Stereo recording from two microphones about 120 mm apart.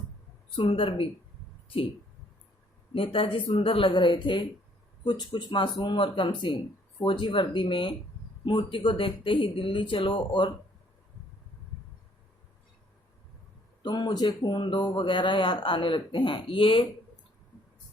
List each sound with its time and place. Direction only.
0.5 s speech: 45° left (ahead or behind)
2.9 s speech: 50° left (ahead or behind)
13.8 s speech: 35° left (ahead or behind)